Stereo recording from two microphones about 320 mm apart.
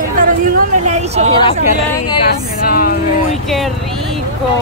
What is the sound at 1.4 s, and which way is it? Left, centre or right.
Speech, centre.